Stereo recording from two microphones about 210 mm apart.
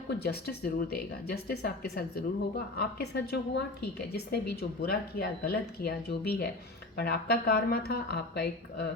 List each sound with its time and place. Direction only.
0.1 s speech: 50° left (ahead or behind)